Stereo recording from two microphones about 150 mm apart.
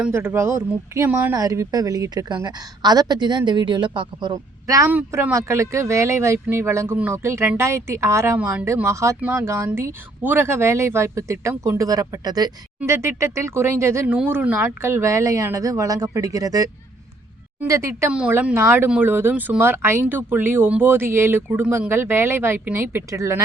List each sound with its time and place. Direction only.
0.0 s speech: 15° right (ahead or behind)
4.9 s speech: 10° right (ahead or behind)